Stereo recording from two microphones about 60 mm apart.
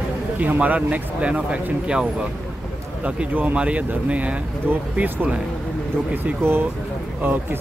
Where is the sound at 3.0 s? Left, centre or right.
Right.